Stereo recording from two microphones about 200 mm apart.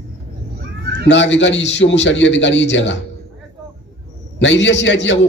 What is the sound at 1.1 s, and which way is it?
A man's voice, 65° left (ahead or behind).